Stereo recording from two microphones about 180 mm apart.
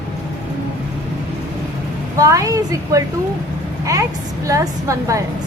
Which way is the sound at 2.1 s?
20° right (ahead or behind).